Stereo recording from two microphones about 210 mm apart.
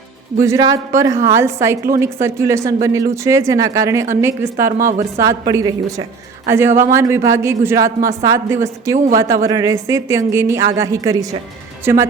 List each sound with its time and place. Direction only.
0.4 s a man's voice: 15° right (ahead or behind)
4.9 s a woman's voice: 40° right (ahead or behind)
5.2 s a man's voice: 15° right (ahead or behind)